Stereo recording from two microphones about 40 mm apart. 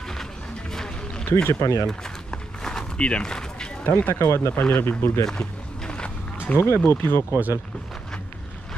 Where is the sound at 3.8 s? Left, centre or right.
Left.